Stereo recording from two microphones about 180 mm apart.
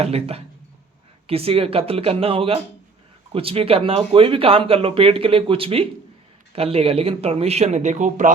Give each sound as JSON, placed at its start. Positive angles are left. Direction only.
{"t": 0.0, "sound": "speech", "side_deg": -35}